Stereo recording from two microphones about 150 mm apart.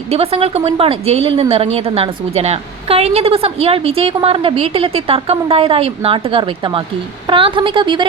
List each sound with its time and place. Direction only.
0.1 s a woman's voice: 40° right (ahead or behind)